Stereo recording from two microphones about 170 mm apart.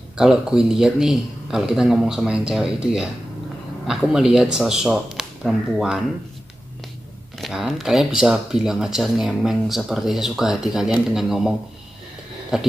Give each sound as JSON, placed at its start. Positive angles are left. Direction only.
{"t": 0.2, "sound": "speech", "side_deg": -5}
{"t": 7.3, "sound": "speech", "side_deg": 0}